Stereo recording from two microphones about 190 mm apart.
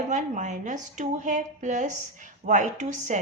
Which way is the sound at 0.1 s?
40° right (ahead or behind).